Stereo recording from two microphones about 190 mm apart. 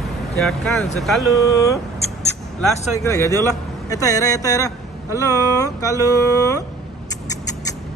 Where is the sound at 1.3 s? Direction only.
15° left (ahead or behind).